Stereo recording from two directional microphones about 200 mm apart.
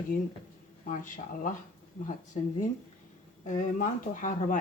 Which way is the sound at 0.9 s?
40° left (ahead or behind).